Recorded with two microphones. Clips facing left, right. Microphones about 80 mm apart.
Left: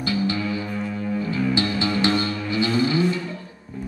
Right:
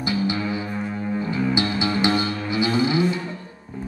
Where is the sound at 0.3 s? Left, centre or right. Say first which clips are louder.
Even; right.